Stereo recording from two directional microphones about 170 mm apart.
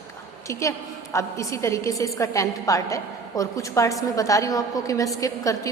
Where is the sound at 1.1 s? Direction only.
20° left (ahead or behind).